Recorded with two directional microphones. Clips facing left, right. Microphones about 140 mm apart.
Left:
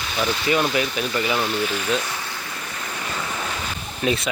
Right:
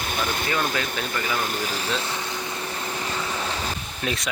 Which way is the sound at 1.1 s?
15° left (ahead or behind).